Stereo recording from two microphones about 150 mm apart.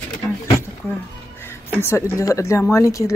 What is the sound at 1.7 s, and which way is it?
Speech, 15° left (ahead or behind).